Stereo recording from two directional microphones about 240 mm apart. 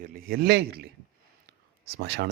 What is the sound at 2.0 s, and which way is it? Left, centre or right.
Speech, right.